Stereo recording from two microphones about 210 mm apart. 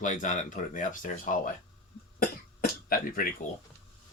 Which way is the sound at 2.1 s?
45° left (ahead or behind).